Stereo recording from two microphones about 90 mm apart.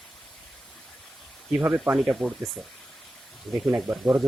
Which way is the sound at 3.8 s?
15° right (ahead or behind).